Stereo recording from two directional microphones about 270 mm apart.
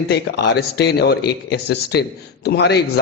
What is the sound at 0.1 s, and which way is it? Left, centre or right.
A man's voice, left.